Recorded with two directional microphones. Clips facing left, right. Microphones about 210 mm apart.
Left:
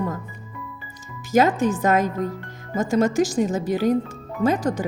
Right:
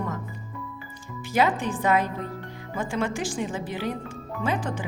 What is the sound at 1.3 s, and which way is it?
Speech, 45° left (ahead or behind).